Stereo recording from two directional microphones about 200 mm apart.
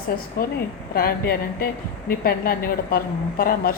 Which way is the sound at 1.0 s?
45° left (ahead or behind).